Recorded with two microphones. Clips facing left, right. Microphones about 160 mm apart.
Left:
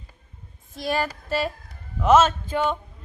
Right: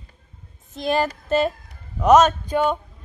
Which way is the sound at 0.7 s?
20° right (ahead or behind).